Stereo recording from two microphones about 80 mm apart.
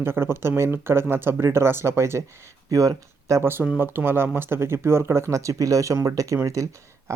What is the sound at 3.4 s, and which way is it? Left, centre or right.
Speech, right.